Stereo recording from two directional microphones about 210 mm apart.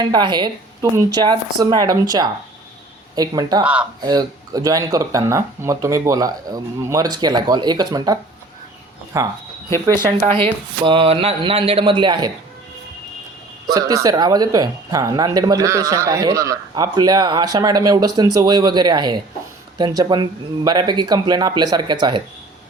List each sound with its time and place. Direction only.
0.0 s speech: 20° right (ahead or behind)
10.1 s speech: 30° right (ahead or behind)
13.7 s speech: 15° right (ahead or behind)